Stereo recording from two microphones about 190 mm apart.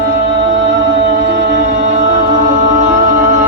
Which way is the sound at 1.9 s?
40° right (ahead or behind).